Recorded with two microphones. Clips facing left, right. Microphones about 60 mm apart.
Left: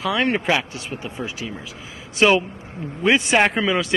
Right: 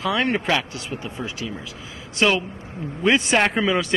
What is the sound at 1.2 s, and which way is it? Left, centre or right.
A woman's voice, centre.